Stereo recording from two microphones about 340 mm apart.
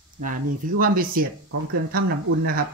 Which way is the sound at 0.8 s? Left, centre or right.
Right.